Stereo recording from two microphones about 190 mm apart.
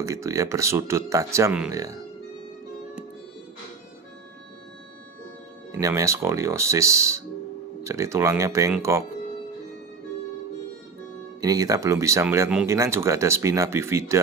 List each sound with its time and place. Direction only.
0.0 s speech: 15° right (ahead or behind)
5.7 s speech: 15° right (ahead or behind)
11.4 s speech: 20° right (ahead or behind)